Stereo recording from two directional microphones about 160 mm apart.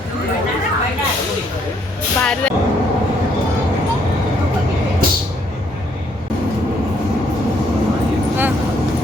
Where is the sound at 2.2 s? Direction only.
5° left (ahead or behind).